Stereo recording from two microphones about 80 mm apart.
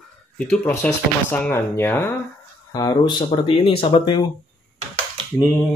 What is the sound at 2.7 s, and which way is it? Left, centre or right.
Speech, left.